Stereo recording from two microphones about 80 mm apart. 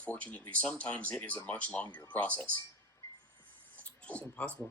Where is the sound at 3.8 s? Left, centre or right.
Centre.